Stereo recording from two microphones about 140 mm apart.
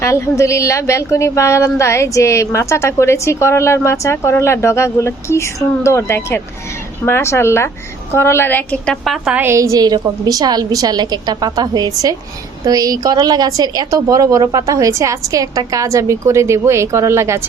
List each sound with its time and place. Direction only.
0.0 s a woman's voice: 20° left (ahead or behind); by 9.4 s centre (ahead or behind)
9.4 s a woman's voice: 20° right (ahead or behind)